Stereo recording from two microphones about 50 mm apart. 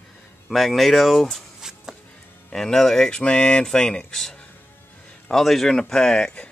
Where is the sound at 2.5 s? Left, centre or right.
Centre.